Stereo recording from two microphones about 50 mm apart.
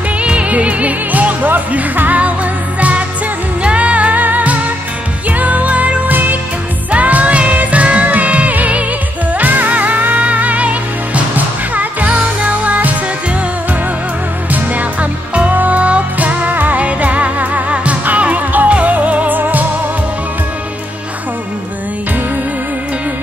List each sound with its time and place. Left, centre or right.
0.2 s music: right
14.5 s music: right